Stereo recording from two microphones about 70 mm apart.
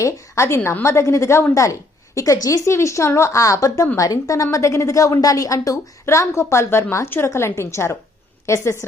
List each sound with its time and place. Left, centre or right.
0.0 s a woman's voice: left
2.1 s a woman's voice: left